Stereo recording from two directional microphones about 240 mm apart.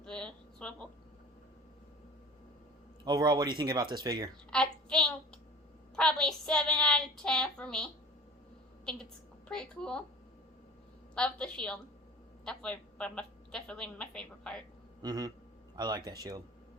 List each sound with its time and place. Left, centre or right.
0.0 s a sound: centre
3.0 s speech: centre
4.5 s child singing: centre
6.0 s a woman's voice: centre
11.1 s a woman's voice: centre
15.0 s speech: centre